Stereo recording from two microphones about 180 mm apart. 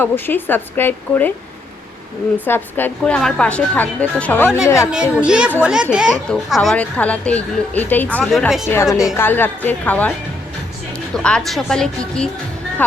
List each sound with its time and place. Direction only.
0.0 s a woman's voice: 10° left (ahead or behind)
2.4 s a woman's voice: 10° left (ahead or behind)
5.1 s a woman's voice: 5° right (ahead or behind)
9.1 s a woman's voice: 10° left (ahead or behind)
11.1 s a woman's voice: 5° left (ahead or behind)